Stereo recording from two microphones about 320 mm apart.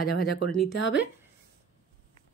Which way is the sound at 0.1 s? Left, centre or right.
Left.